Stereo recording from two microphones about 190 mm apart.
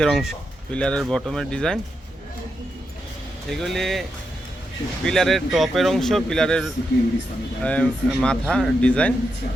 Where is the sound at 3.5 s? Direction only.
Centre (ahead or behind).